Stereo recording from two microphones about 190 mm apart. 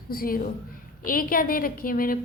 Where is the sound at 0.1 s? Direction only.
50° left (ahead or behind).